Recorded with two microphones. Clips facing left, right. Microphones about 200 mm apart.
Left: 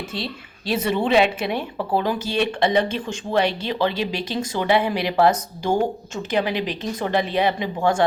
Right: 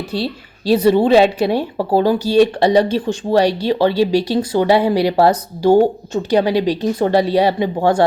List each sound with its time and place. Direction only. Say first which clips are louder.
0.1 s a woman's voice: right 8 dB; 35° right (ahead or behind)